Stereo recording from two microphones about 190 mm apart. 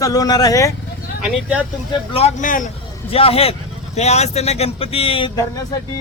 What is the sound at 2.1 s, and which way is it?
Speech, 35° left (ahead or behind).